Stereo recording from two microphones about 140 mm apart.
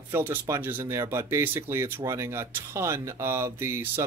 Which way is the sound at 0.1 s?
15° right (ahead or behind).